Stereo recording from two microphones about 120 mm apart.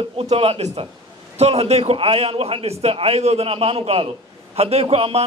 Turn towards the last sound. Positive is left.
turn(degrees=-55)  # may be behind; listen again after turning